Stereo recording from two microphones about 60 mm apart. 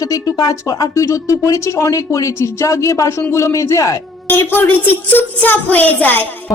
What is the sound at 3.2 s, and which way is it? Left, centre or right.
Speech, left.